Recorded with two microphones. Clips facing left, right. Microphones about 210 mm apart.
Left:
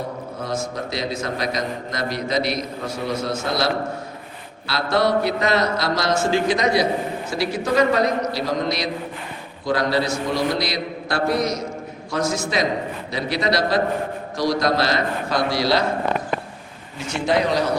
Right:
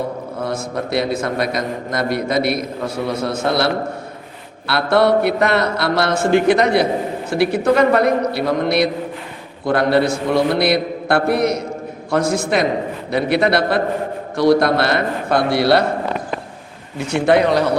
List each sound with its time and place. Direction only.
0.4 s a man's voice: 60° right (ahead or behind)
17.1 s a man's voice: 60° right (ahead or behind)